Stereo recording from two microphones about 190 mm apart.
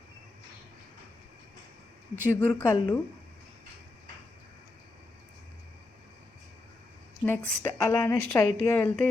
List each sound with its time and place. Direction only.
2.3 s a woman's voice: 10° left (ahead or behind)
2.7 s speech: 25° left (ahead or behind)
7.3 s a woman's voice: 10° left (ahead or behind)